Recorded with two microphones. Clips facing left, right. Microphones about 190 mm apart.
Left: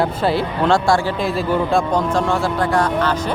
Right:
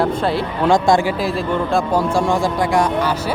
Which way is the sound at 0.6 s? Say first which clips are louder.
Right 3 dB; 15° right (ahead or behind).